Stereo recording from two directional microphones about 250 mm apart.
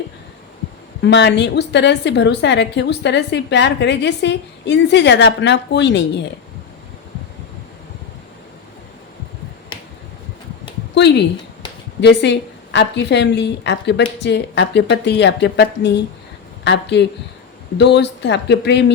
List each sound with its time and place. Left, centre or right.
1.0 s a woman's voice: left
10.9 s a woman's voice: left